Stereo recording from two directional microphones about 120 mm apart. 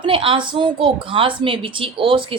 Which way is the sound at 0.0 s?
45° right (ahead or behind).